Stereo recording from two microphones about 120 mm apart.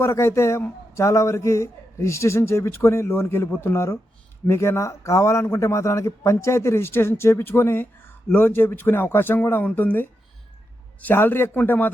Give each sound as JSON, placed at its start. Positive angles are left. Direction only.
{"t": 0.0, "sound": "a man's voice", "side_deg": 20}